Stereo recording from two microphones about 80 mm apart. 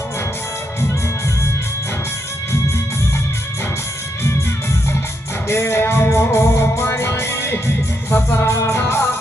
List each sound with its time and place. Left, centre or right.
5.5 s music: left